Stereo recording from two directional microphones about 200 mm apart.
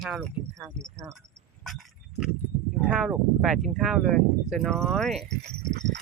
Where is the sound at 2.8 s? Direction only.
5° right (ahead or behind).